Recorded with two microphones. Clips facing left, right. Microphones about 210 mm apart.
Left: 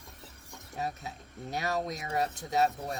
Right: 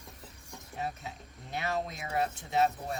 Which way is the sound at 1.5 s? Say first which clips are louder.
Left 2 dB; 40° left (ahead or behind).